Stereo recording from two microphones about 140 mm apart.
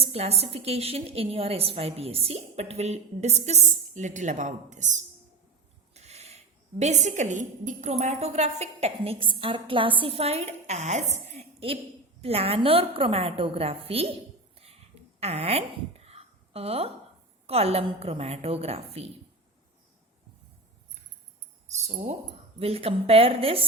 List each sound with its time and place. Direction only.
0.0 s a woman's voice: 45° right (ahead or behind)
15.2 s a woman's voice: 50° right (ahead or behind)
21.7 s tambourine: 55° right (ahead or behind)
22.5 s a woman's voice: 45° right (ahead or behind)